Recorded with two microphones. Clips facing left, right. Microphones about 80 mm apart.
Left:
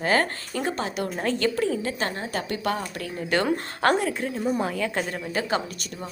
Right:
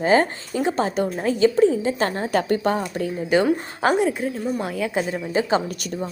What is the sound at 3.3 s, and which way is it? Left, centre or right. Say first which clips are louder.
Speech: right 5 dB; centre.